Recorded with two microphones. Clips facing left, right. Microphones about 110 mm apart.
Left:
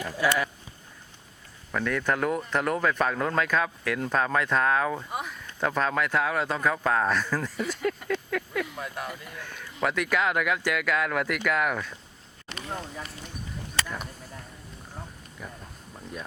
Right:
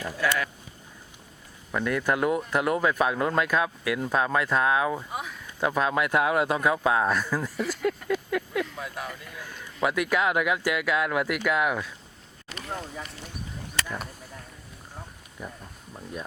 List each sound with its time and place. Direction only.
0.2 s speech: 10° left (ahead or behind)
1.7 s speech: 10° right (ahead or behind)
7.6 s a sound: centre (ahead or behind)
8.6 s speech: 5° left (ahead or behind)
12.5 s a sound: centre (ahead or behind)
15.4 s speech: 5° right (ahead or behind)